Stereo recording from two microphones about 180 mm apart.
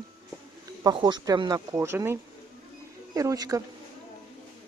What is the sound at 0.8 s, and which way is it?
Speech, 25° right (ahead or behind).